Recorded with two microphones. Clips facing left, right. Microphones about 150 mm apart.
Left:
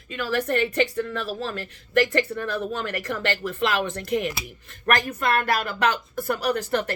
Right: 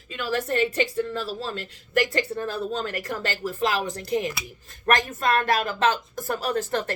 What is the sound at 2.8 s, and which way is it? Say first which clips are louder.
Speech: left 2 dB; 40° right (ahead or behind).